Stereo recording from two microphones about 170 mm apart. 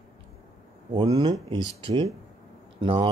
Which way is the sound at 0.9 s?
25° right (ahead or behind).